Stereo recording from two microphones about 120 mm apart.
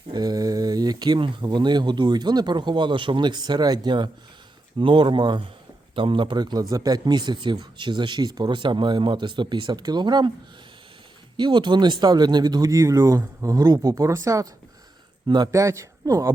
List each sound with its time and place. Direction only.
0.1 s speech: 35° right (ahead or behind)
11.3 s speech: 40° right (ahead or behind)
15.5 s speech: 25° right (ahead or behind)